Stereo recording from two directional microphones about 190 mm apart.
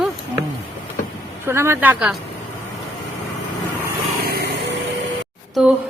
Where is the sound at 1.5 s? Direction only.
15° right (ahead or behind).